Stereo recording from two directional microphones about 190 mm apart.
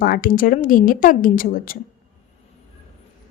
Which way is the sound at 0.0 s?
50° left (ahead or behind).